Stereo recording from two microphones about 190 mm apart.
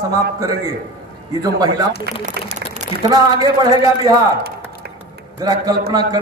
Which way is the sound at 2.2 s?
40° right (ahead or behind).